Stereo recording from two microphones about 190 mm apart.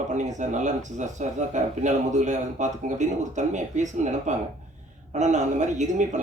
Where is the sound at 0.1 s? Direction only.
40° right (ahead or behind).